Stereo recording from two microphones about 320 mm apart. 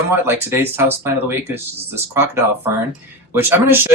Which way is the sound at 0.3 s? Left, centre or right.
Centre.